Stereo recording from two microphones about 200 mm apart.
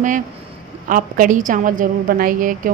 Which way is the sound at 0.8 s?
45° right (ahead or behind).